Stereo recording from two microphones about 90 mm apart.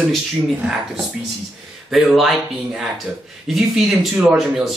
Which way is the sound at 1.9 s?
Centre (ahead or behind).